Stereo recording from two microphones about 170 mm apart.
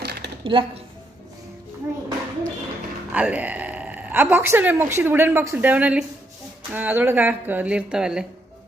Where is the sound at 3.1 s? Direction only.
10° right (ahead or behind).